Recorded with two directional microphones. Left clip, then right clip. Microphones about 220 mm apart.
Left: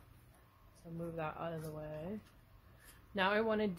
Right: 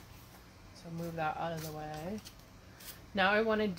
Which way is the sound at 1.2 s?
45° left (ahead or behind).